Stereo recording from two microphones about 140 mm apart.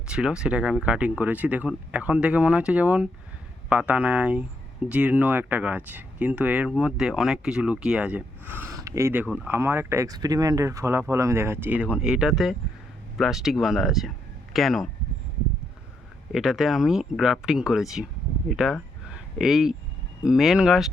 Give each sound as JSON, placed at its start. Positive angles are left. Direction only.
{"t": 0.1, "sound": "speech", "side_deg": -5}
{"t": 16.3, "sound": "speech", "side_deg": 0}